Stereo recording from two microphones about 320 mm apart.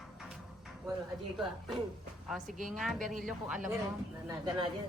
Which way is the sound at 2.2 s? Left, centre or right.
Centre.